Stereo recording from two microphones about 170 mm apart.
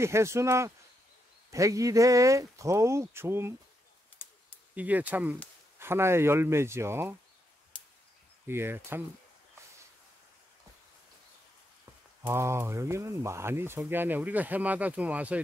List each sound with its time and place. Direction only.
0.0 s speech: 15° right (ahead or behind)
4.7 s speech: 10° right (ahead or behind)
7.7 s arrow: 5° left (ahead or behind)
8.5 s speech: 15° right (ahead or behind)
12.2 s speech: 15° right (ahead or behind)